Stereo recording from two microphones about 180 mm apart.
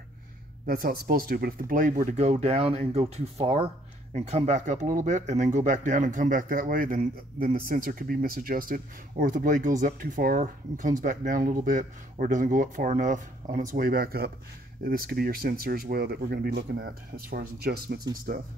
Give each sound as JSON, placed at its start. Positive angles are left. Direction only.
{"t": 0.7, "sound": "speech", "side_deg": -55}